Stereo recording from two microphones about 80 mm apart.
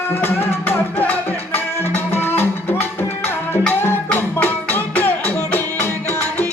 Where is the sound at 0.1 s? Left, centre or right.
Left.